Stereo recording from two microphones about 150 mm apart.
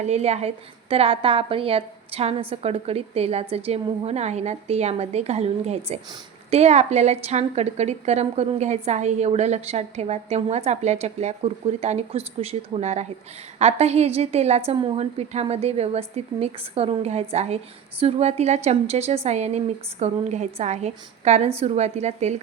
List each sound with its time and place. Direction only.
0.0 s a woman's voice: 45° right (ahead or behind)